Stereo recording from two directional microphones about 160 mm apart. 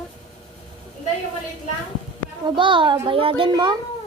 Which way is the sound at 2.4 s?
30° right (ahead or behind).